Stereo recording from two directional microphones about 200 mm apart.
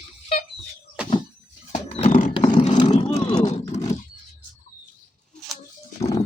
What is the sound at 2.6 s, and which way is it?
Vehicle, 30° left (ahead or behind).